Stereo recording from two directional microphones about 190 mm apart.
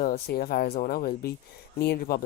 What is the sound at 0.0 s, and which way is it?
Speech, 55° left (ahead or behind).